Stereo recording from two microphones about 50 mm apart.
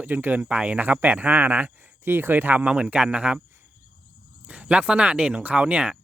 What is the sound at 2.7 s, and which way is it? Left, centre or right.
Speech, right.